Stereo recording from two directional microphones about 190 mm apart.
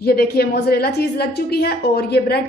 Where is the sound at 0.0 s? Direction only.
55° left (ahead or behind).